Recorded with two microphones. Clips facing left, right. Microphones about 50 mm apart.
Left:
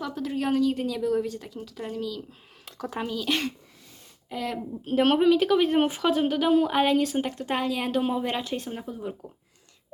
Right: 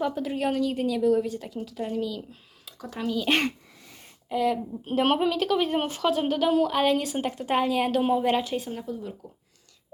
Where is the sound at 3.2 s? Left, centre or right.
Right.